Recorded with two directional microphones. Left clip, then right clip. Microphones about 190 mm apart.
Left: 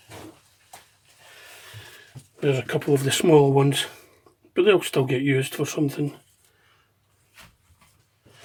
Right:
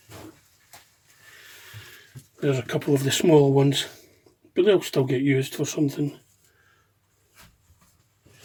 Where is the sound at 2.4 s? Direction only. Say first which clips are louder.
Left 2 dB; 25° right (ahead or behind).